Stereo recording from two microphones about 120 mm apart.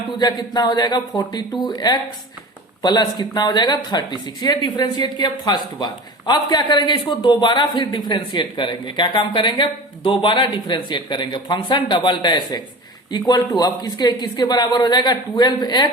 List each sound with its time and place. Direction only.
0.2 s speech: 35° left (ahead or behind)